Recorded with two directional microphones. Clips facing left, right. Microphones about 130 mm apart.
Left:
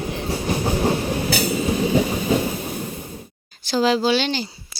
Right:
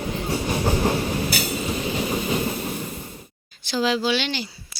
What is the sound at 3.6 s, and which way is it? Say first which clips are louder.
Speech: left 4 dB; 40° left (ahead or behind).